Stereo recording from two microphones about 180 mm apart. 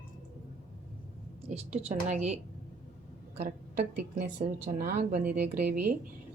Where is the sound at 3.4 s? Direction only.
50° right (ahead or behind).